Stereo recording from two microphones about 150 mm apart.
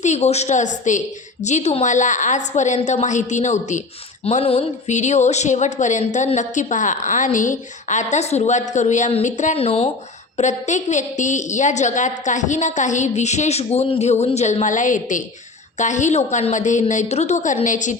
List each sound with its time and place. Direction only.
0.0 s a woman's voice: 50° left (ahead or behind)
10.3 s a woman's voice: 55° left (ahead or behind)